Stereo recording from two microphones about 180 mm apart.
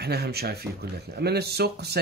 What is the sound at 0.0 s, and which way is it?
Speech, 65° right (ahead or behind).